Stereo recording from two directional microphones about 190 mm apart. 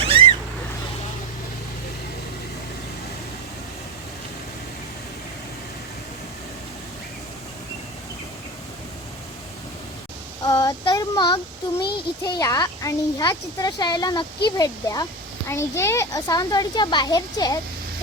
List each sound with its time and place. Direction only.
0.0 s cat: 30° right (ahead or behind)
10.4 s child singing: 20° left (ahead or behind)
11.8 s a child's voice: 20° left (ahead or behind)